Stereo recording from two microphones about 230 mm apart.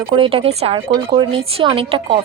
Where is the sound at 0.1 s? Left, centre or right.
Right.